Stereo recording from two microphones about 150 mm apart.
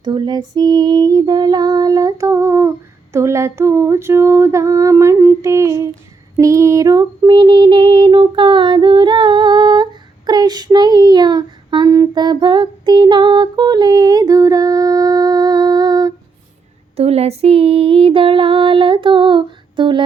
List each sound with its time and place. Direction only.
0.0 s female singing: 30° right (ahead or behind)
6.3 s child singing: 20° right (ahead or behind)
17.0 s female singing: 45° right (ahead or behind)